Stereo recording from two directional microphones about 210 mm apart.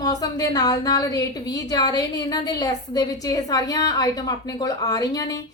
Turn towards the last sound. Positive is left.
turn(degrees=15)  # may be behind; listen again after turning